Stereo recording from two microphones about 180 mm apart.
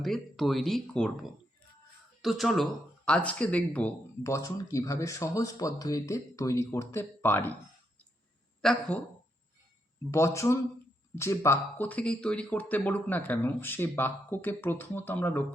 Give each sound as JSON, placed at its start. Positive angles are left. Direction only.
{"t": 0.0, "sound": "speech", "side_deg": 0}
{"t": 8.6, "sound": "speech", "side_deg": 0}
{"t": 10.1, "sound": "speech", "side_deg": 15}